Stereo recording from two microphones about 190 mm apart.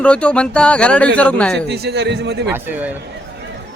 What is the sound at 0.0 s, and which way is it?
Speech, 5° left (ahead or behind).